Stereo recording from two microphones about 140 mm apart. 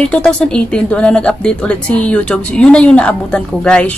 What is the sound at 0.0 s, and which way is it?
Speech, 10° left (ahead or behind).